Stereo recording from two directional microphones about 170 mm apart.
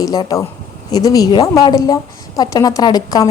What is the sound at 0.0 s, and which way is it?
A woman's voice, 20° left (ahead or behind).